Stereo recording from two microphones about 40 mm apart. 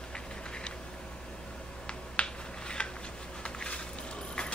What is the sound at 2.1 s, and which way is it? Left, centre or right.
Finger snapping, left.